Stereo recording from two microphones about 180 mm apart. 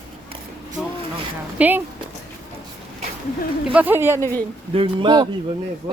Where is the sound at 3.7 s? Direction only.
10° right (ahead or behind).